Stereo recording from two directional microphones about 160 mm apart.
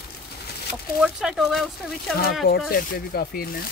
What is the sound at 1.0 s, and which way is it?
Speech, 5° right (ahead or behind).